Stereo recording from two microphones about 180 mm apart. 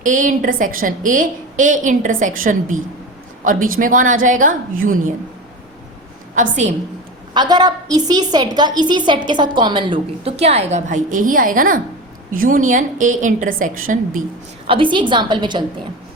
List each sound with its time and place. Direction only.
0.0 s a woman's voice: 45° right (ahead or behind)
6.3 s a woman's voice: 45° right (ahead or behind)
7.3 s a woman's voice: 20° right (ahead or behind); by 14.2 s 50° right (ahead or behind)
14.7 s a woman's voice: 25° right (ahead or behind)